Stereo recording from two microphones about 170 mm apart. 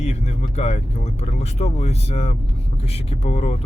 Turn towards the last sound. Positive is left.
turn(degrees=40)  # may be behind; listen again after turning